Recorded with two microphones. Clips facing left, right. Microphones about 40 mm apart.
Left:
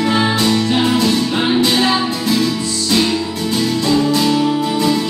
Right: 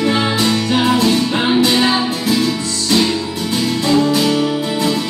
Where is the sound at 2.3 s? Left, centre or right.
Centre.